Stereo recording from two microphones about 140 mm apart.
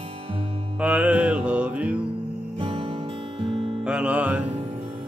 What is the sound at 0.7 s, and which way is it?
Music, 10° right (ahead or behind).